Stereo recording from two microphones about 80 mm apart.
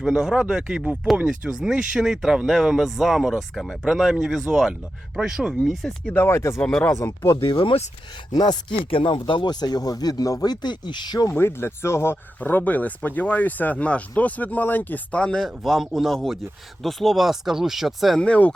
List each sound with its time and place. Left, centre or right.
0.0 s speech: centre
6.1 s speech: left
6.6 s speech: centre
6.9 s speech: left
7.4 s speech: left
8.3 s speech: left
8.8 s speech: left
11.3 s speech: left
12.4 s speech: left
15.4 s speech: centre
18.2 s speech: centre